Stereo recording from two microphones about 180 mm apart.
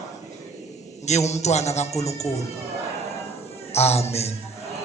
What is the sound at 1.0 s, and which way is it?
A man's voice, 40° left (ahead or behind).